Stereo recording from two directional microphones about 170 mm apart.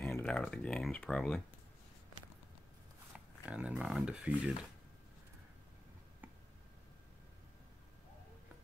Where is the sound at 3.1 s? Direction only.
5° right (ahead or behind).